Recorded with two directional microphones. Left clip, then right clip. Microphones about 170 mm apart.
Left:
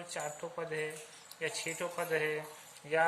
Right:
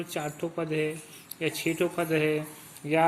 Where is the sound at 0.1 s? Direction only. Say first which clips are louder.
Right 4 dB; 20° right (ahead or behind).